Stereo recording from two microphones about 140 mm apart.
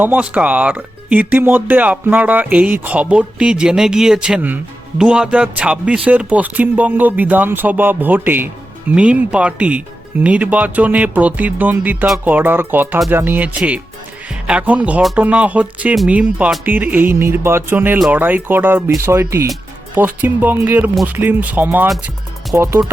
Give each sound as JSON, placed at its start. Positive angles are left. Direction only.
{"t": 0.0, "sound": "speech", "side_deg": -10}